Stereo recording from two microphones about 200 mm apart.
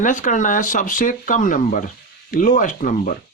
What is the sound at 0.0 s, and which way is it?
Speech, 40° left (ahead or behind).